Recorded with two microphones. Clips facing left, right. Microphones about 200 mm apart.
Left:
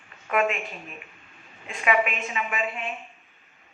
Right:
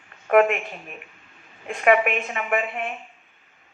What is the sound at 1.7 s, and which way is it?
A woman's voice, 50° right (ahead or behind).